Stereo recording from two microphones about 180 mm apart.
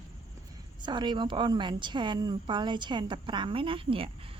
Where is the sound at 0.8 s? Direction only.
25° right (ahead or behind).